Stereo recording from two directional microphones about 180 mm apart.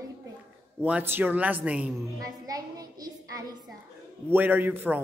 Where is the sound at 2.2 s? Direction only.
20° right (ahead or behind).